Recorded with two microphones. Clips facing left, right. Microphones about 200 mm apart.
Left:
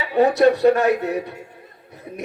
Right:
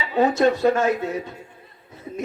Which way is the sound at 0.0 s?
65° left (ahead or behind).